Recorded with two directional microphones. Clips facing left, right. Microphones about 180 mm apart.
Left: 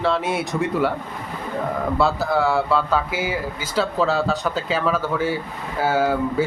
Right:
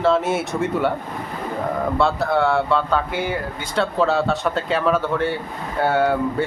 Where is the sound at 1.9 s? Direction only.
Centre (ahead or behind).